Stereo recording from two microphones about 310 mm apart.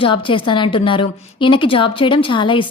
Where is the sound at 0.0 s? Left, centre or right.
Centre.